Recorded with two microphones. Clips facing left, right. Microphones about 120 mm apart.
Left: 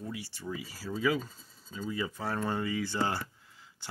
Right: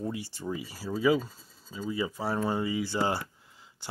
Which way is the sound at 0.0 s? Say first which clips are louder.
Right 5 dB; 30° right (ahead or behind).